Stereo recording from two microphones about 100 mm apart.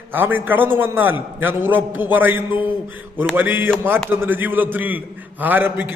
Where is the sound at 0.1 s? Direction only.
20° right (ahead or behind).